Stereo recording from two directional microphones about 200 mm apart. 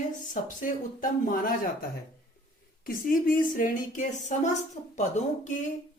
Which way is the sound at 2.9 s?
45° left (ahead or behind).